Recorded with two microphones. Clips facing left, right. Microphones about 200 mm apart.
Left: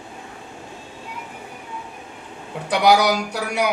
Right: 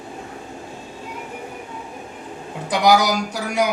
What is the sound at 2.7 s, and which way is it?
Speech, 65° left (ahead or behind).